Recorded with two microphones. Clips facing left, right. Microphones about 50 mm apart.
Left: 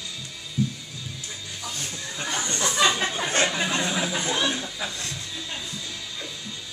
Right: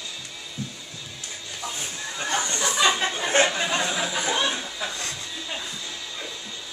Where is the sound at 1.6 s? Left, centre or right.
Centre.